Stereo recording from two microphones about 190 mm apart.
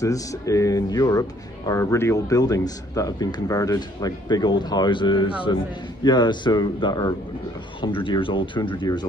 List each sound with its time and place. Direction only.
0.0 s speech: 15° left (ahead or behind)